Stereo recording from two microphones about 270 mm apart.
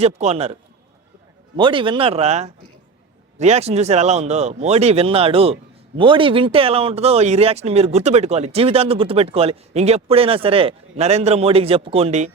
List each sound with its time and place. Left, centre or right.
0.0 s speech: right
1.5 s speech: centre